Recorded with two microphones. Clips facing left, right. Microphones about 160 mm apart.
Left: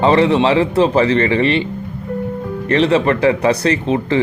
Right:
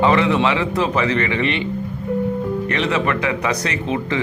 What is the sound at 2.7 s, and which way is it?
Speech, 30° left (ahead or behind).